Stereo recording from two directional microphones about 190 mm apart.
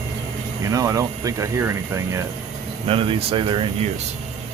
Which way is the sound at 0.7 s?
20° right (ahead or behind).